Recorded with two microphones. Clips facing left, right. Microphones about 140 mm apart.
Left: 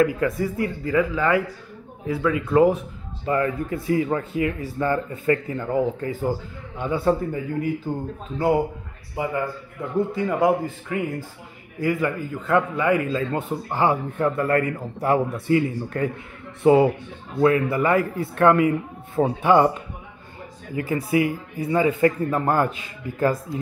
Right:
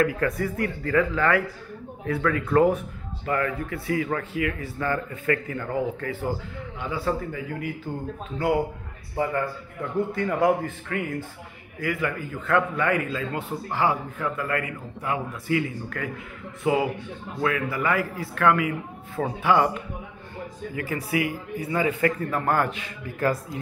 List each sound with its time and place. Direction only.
0.2 s speech: 20° left (ahead or behind)
6.8 s speech: 50° left (ahead or behind)
7.1 s a man's voice: 30° left (ahead or behind)
20.7 s speech: 30° left (ahead or behind)